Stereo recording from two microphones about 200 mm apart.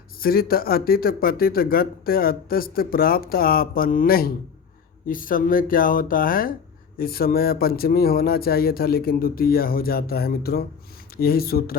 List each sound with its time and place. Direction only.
0.2 s speech: 50° left (ahead or behind)